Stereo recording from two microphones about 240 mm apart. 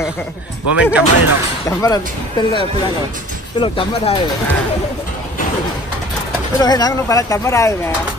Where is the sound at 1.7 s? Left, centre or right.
Centre.